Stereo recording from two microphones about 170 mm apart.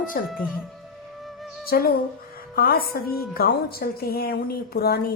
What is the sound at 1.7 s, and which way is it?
A woman's voice, 60° left (ahead or behind).